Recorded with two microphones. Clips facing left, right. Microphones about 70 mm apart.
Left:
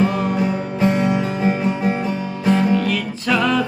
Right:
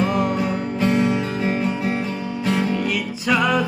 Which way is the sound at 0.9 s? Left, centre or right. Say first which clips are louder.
Left 1 dB; centre.